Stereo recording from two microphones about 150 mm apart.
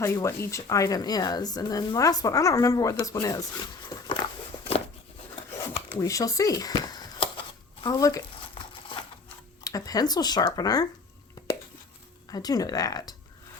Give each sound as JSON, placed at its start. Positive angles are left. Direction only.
{"t": 0.0, "sound": "speech", "side_deg": 20}
{"t": 3.8, "sound": "a sound", "side_deg": 30}
{"t": 5.5, "sound": "a sound", "side_deg": 15}
{"t": 7.8, "sound": "speech", "side_deg": 25}
{"t": 9.6, "sound": "speech", "side_deg": 25}
{"t": 12.3, "sound": "speech", "side_deg": 25}